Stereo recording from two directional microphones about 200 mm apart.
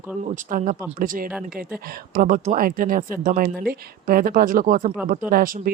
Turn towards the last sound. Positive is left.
turn(degrees=-45)  # may be behind; listen again after turning